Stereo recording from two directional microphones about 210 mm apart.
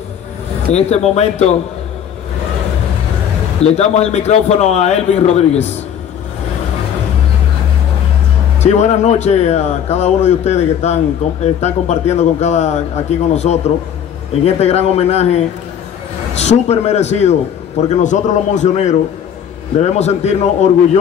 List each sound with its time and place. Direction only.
0.7 s a man's voice: 30° left (ahead or behind)
3.6 s a man's voice: 30° left (ahead or behind)
8.5 s a man's voice: 35° left (ahead or behind)